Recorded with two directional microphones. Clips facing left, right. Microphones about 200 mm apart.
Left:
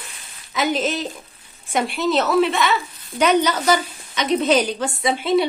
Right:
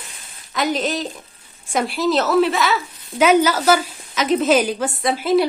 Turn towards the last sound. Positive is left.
turn(degrees=0)  # may be behind; listen again after turning